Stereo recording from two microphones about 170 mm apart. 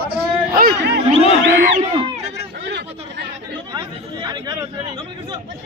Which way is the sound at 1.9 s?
35° right (ahead or behind).